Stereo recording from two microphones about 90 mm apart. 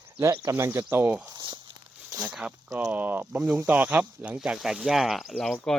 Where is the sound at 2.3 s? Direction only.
10° right (ahead or behind).